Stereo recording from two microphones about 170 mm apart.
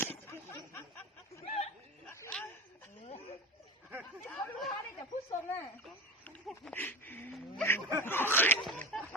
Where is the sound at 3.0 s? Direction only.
35° left (ahead or behind).